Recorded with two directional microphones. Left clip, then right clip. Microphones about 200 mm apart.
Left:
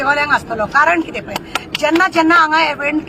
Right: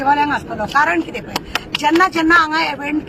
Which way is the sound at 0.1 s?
10° left (ahead or behind).